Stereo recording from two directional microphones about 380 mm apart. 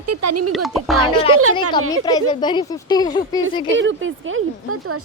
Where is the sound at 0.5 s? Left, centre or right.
Centre.